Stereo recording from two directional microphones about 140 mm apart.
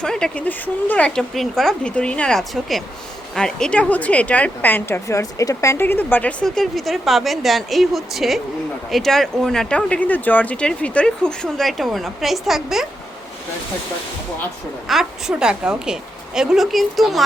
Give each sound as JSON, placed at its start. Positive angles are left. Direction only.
{"t": 0.0, "sound": "a woman's voice", "side_deg": 5}
{"t": 14.8, "sound": "speech", "side_deg": -5}